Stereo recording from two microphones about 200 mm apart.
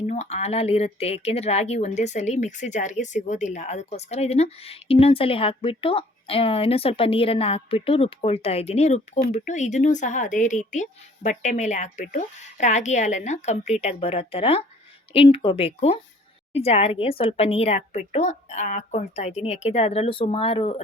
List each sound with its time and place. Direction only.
0.1 s speech: 35° left (ahead or behind)